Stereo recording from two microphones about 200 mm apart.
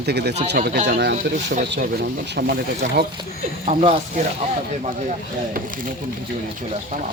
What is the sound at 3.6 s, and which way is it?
Speech, 30° right (ahead or behind).